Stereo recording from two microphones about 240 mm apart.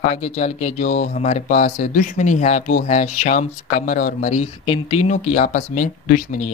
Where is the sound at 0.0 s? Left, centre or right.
Left.